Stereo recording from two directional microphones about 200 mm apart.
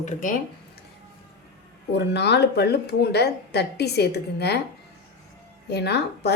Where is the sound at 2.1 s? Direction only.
55° left (ahead or behind).